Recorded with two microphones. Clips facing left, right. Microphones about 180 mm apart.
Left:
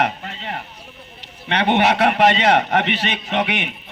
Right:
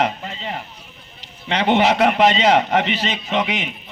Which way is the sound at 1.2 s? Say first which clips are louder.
Even; 65° left (ahead or behind).